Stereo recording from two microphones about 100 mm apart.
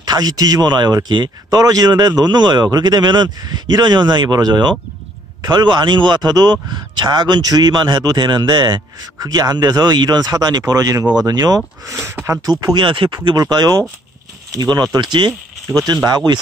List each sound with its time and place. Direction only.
0.0 s a man's voice: 40° right (ahead or behind)
12.7 s a man's voice: 55° right (ahead or behind); by 16.0 s 40° right (ahead or behind)